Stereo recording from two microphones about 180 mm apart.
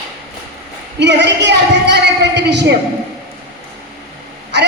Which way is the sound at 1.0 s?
70° right (ahead or behind).